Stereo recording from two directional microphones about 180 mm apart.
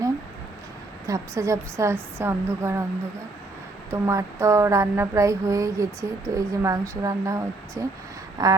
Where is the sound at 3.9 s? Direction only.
15° right (ahead or behind).